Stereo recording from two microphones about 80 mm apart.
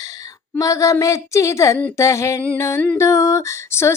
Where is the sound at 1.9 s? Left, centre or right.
Left.